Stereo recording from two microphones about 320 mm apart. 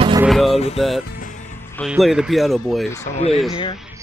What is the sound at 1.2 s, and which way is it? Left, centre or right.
Music, left.